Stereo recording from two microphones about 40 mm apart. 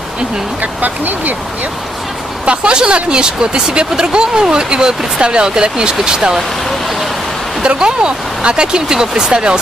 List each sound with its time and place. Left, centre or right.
0.6 s speech: right
2.4 s speech: right
7.6 s speech: right